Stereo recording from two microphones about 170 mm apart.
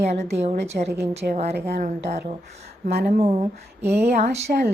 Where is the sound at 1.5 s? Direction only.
70° right (ahead or behind).